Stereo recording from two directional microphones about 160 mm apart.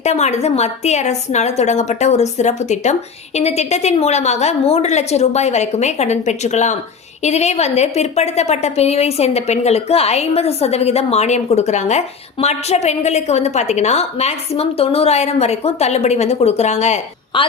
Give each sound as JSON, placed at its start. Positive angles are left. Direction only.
{"t": 0.0, "sound": "a woman's voice", "side_deg": 45}
{"t": 17.3, "sound": "a woman's voice", "side_deg": 30}